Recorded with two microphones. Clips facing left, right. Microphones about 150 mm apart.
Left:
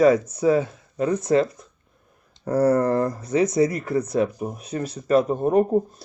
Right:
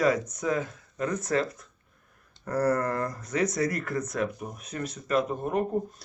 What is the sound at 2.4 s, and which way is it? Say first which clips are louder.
Speech: left 7 dB; 25° left (ahead or behind).